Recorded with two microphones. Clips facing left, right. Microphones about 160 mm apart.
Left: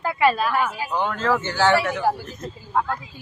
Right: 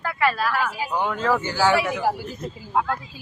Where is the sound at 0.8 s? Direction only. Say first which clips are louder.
Even; 10° right (ahead or behind).